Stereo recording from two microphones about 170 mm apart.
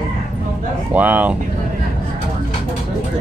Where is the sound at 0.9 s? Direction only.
10° right (ahead or behind).